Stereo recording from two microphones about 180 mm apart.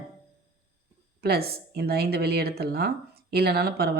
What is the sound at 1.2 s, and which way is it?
Speech, 60° right (ahead or behind).